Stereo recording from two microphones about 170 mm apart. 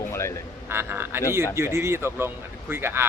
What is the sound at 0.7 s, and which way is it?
A man's voice, 15° right (ahead or behind).